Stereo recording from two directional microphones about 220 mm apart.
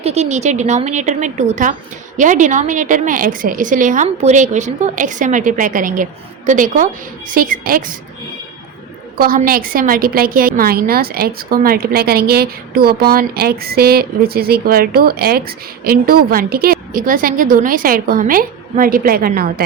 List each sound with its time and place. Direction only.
0.0 s a woman's voice: 30° right (ahead or behind)
9.1 s a woman's voice: 40° right (ahead or behind)